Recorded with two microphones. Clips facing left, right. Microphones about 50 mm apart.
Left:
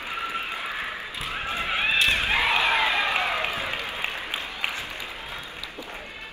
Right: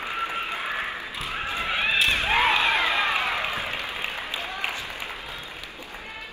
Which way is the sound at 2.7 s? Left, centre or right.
Left.